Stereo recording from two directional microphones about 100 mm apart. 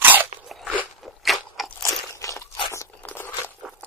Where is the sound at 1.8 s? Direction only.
30° left (ahead or behind).